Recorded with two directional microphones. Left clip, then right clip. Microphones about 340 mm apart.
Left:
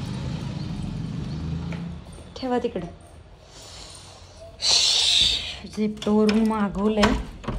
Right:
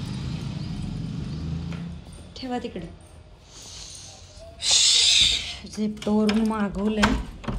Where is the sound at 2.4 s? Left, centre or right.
Left.